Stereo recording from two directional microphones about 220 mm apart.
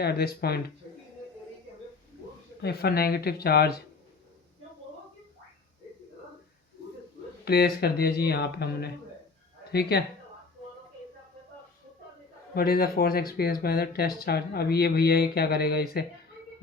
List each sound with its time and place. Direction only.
0.0 s speech: 45° left (ahead or behind)
2.6 s speech: 45° left (ahead or behind)
7.4 s speech: 45° left (ahead or behind)
9.9 s speech: 45° left (ahead or behind)
12.5 s speech: 45° left (ahead or behind)